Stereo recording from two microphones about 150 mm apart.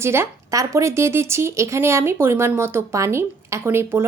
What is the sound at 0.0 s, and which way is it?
Speech, 15° right (ahead or behind).